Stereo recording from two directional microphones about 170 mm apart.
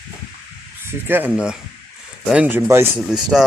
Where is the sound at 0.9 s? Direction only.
10° right (ahead or behind).